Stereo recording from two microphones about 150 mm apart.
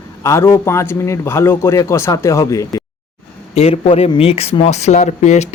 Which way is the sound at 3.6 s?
45° left (ahead or behind).